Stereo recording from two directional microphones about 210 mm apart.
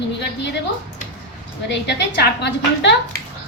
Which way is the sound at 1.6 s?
55° left (ahead or behind).